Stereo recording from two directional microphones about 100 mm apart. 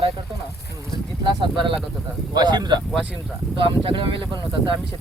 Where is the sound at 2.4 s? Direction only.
45° right (ahead or behind).